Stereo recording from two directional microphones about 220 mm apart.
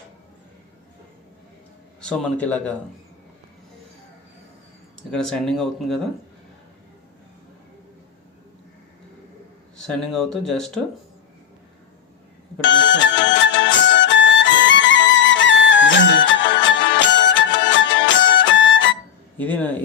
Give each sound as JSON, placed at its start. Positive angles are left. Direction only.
{"t": 2.0, "sound": "speech", "side_deg": 5}
{"t": 5.1, "sound": "speech", "side_deg": 5}
{"t": 9.8, "sound": "speech", "side_deg": 0}
{"t": 12.6, "sound": "music", "side_deg": 55}
{"t": 19.4, "sound": "speech", "side_deg": 10}